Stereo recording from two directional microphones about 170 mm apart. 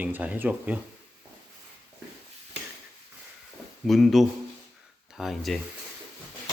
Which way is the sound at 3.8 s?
Centre (ahead or behind).